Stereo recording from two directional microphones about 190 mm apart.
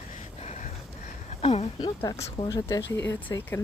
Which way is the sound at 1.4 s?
30° left (ahead or behind).